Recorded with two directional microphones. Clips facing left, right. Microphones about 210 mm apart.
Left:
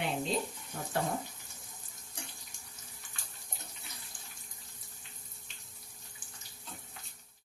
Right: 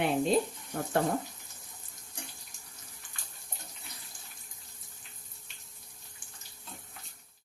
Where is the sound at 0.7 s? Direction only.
60° right (ahead or behind).